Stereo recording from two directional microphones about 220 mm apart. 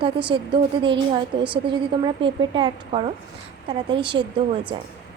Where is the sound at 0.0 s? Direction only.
20° right (ahead or behind).